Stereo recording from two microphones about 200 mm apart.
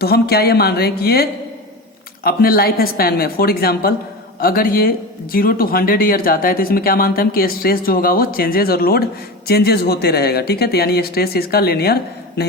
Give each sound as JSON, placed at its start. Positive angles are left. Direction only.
{"t": 0.0, "sound": "speech", "side_deg": 50}